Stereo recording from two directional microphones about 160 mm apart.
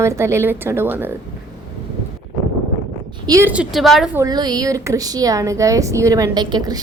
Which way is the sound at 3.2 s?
20° right (ahead or behind).